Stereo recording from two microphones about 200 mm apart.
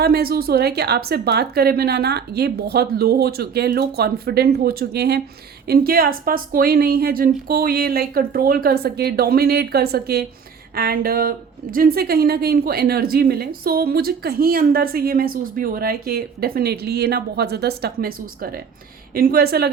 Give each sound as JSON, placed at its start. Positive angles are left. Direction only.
{"t": 0.0, "sound": "a woman's voice", "side_deg": -50}